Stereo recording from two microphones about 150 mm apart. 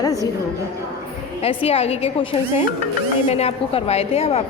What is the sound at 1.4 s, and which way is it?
A woman's voice, 40° left (ahead or behind).